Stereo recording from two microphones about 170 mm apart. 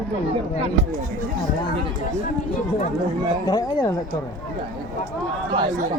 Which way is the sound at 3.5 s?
25° left (ahead or behind).